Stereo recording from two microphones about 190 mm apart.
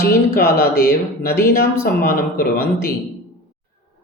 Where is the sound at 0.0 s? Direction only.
55° left (ahead or behind).